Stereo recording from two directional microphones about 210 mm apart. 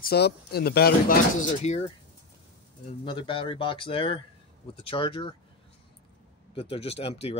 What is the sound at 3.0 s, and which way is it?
Speech, 25° left (ahead or behind).